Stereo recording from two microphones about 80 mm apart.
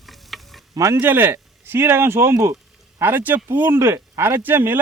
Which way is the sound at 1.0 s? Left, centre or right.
Right.